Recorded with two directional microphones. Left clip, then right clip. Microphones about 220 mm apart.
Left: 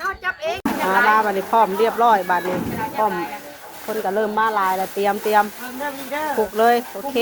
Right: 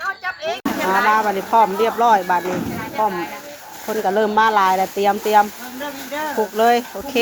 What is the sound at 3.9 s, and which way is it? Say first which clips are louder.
Speech: right 3 dB; 20° right (ahead or behind).